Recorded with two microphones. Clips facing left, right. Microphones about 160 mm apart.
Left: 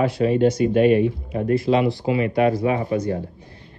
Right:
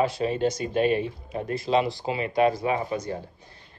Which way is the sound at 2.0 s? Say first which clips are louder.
Left 4 dB; 30° right (ahead or behind).